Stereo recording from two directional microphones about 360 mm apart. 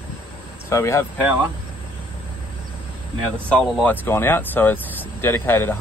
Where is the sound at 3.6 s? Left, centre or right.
Centre.